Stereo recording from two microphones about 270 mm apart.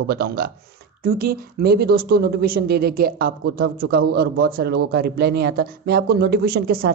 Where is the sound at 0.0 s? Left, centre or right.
Right.